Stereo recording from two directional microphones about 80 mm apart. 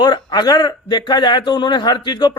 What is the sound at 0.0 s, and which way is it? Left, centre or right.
A man's voice, left.